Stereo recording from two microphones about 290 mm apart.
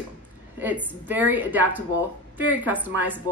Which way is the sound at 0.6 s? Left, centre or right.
Centre.